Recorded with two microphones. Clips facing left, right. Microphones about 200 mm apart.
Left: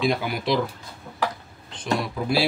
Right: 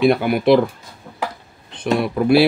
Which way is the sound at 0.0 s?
60° right (ahead or behind).